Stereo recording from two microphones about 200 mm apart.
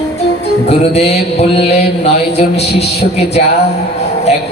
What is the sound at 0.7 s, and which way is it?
A man's voice, 30° left (ahead or behind).